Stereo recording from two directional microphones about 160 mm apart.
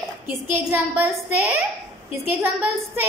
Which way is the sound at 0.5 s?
15° right (ahead or behind).